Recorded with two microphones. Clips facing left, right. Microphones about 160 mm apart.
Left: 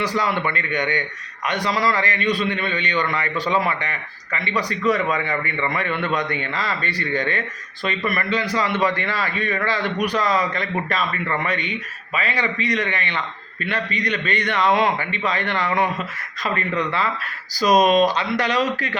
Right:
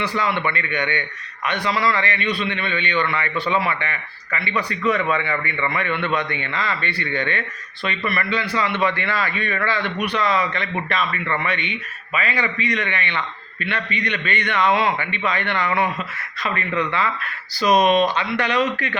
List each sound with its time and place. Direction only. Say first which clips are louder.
0.0 s a man's voice: even; 40° left (ahead or behind)
17.7 s speech: even; 5° right (ahead or behind)
18.0 s a man's voice: left 1 dB; 35° left (ahead or behind)